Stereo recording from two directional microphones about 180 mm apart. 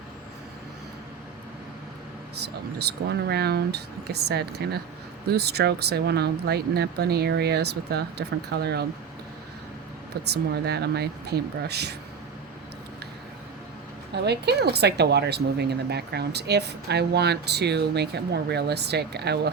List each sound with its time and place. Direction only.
2.7 s speech: 65° right (ahead or behind)
10.5 s speech: 65° right (ahead or behind)
14.1 s speech: 65° right (ahead or behind)